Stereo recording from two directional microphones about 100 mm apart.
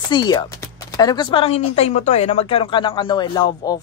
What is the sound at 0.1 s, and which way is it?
Speech, 45° left (ahead or behind).